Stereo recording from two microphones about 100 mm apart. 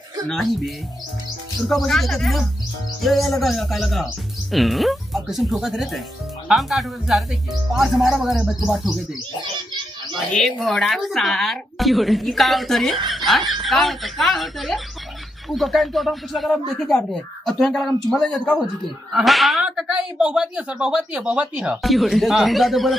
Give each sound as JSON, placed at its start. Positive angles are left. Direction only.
{"t": 0.3, "sound": "a woman's voice", "side_deg": 0}
{"t": 1.7, "sound": "a woman's voice", "side_deg": 5}
{"t": 10.3, "sound": "a woman's voice", "side_deg": 5}
{"t": 19.1, "sound": "speech", "side_deg": 0}
{"t": 21.8, "sound": "a woman's voice", "side_deg": 0}